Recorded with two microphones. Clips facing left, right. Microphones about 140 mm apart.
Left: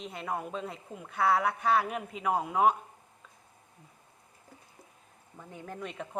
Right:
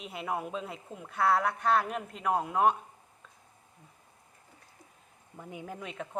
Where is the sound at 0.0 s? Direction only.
5° right (ahead or behind).